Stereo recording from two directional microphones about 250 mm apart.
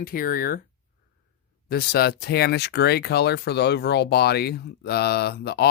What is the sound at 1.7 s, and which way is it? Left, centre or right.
Speech, left.